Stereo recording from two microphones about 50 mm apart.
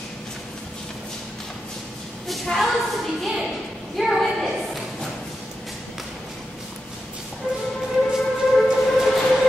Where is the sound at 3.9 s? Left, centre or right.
Centre.